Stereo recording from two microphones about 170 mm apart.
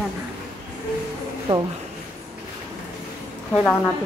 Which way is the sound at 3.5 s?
5° left (ahead or behind).